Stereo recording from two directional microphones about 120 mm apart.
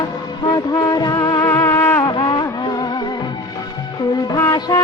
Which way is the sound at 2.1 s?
40° left (ahead or behind).